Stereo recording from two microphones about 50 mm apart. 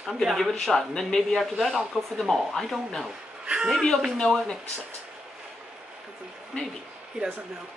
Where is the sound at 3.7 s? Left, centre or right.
Centre.